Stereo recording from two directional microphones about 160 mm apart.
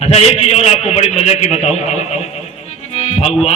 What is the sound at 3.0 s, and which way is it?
Music, 45° left (ahead or behind).